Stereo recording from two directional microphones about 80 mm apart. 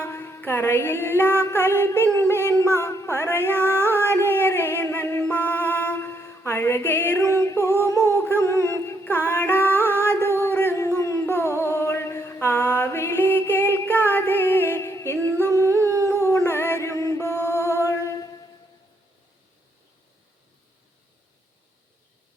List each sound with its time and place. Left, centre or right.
0.0 s music: left
2.1 s a sound: left
3.4 s music: left
4.0 s a sound: left
5.3 s music: left
15.7 s howl: right
16.1 s mantra: left